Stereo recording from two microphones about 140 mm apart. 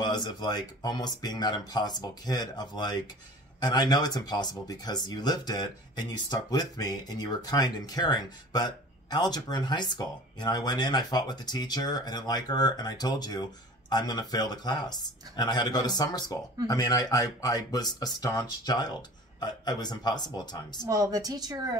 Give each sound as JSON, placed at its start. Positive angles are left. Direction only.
{"t": 0.0, "sound": "speech", "side_deg": 30}
{"t": 20.9, "sound": "speech", "side_deg": -25}